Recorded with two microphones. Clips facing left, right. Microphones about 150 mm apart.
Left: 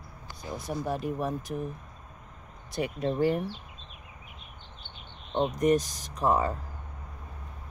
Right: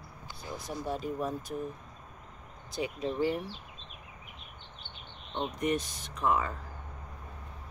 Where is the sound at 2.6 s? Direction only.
60° left (ahead or behind).